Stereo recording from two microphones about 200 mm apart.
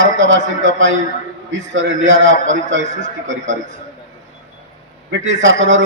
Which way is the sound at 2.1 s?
70° right (ahead or behind).